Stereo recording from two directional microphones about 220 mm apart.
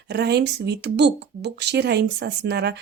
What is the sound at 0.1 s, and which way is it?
Speech, 50° right (ahead or behind).